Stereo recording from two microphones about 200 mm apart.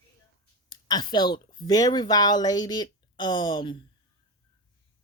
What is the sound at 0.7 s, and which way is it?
Speech, 20° left (ahead or behind).